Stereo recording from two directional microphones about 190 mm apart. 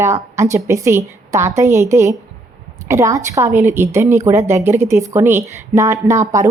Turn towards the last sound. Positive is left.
turn(degrees=-15)  # may be behind; listen again after turning